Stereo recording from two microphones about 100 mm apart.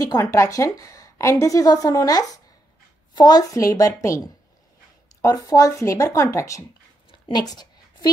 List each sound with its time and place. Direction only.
0.2 s a woman's voice: 25° left (ahead or behind)
5.2 s a woman's voice: 35° left (ahead or behind)
7.3 s a sound: 40° left (ahead or behind)